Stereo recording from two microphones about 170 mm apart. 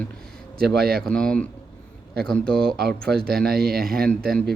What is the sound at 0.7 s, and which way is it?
Speech, 65° right (ahead or behind).